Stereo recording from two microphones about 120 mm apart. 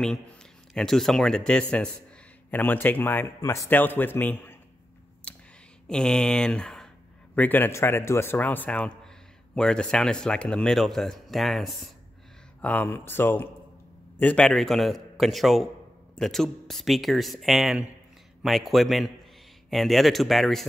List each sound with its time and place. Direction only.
0.7 s speech: 5° left (ahead or behind)
5.3 s a sound: 10° left (ahead or behind)
5.9 s speech: 5° left (ahead or behind)
7.3 s speech: 15° left (ahead or behind)
12.6 s a man's voice: 15° left (ahead or behind)
14.4 s speech: 5° left (ahead or behind)